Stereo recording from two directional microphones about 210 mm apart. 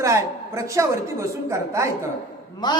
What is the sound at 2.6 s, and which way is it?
Speech, 20° left (ahead or behind).